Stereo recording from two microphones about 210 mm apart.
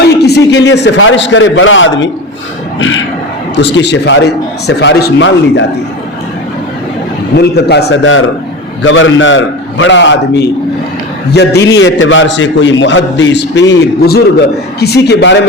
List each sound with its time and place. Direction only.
0.0 s a man's voice: 50° left (ahead or behind)
2.7 s a sound: 65° left (ahead or behind)
3.5 s a man's voice: 55° left (ahead or behind)
7.3 s a man's voice: 50° left (ahead or behind)
11.6 s a man's voice: 60° left (ahead or behind)